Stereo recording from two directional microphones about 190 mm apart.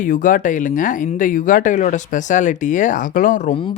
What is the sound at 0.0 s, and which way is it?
Speech, 45° left (ahead or behind).